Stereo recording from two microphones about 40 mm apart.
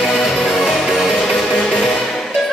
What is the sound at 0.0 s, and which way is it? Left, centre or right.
Music, centre.